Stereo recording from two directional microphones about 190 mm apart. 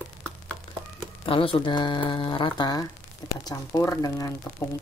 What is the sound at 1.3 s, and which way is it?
Speech, 30° left (ahead or behind).